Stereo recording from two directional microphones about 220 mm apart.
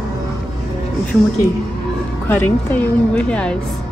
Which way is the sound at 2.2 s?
10° left (ahead or behind).